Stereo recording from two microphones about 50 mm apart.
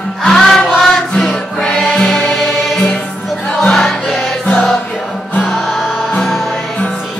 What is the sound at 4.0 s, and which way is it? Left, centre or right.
Music, centre.